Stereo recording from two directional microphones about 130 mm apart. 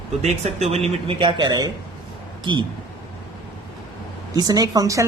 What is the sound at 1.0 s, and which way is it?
Speech, 40° right (ahead or behind).